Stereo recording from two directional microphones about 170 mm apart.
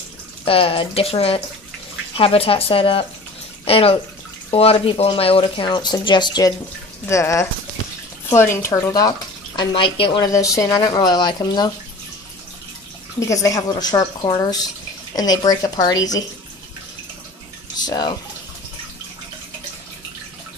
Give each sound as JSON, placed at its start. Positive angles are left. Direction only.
{"t": 0.5, "sound": "speech", "side_deg": 30}
{"t": 9.6, "sound": "a woman's voice", "side_deg": 30}
{"t": 13.2, "sound": "a woman's voice", "side_deg": 20}
{"t": 17.7, "sound": "speech", "side_deg": 25}